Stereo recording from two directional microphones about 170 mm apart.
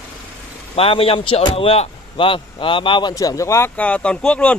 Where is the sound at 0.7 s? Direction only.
35° left (ahead or behind).